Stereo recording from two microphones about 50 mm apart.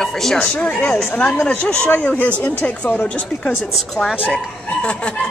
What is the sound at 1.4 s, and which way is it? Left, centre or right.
Speech, left.